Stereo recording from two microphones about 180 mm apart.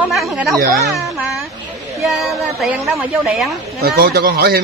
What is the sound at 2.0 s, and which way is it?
Speech, centre (ahead or behind).